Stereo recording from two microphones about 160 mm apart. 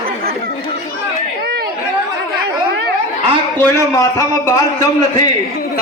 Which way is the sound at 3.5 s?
20° left (ahead or behind).